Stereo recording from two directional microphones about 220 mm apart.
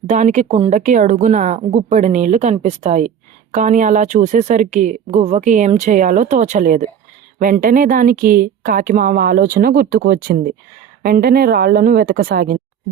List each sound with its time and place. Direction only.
0.1 s a woman's voice: 30° right (ahead or behind)